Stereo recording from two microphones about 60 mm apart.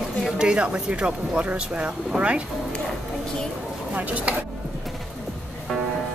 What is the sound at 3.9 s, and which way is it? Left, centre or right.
Speech, right.